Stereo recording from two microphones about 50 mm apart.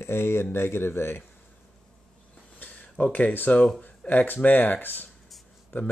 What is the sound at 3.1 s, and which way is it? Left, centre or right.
Speech, left.